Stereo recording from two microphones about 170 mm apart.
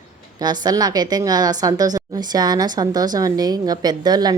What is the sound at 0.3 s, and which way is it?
A woman's voice, 25° right (ahead or behind).